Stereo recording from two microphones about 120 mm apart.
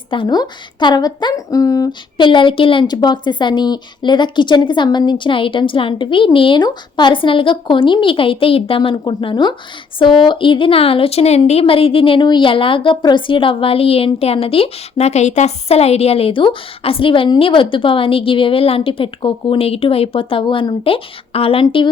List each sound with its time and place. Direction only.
0.1 s a woman's voice: 40° left (ahead or behind)